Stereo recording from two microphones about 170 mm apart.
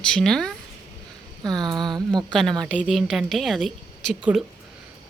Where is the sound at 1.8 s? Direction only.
25° right (ahead or behind).